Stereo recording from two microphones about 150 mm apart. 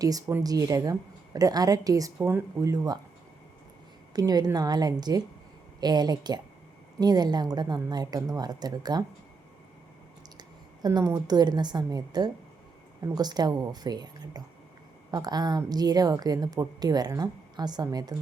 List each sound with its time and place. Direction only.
0.0 s a woman's voice: 25° right (ahead or behind)
4.1 s a woman's voice: 25° right (ahead or behind)
10.8 s a woman's voice: 25° right (ahead or behind)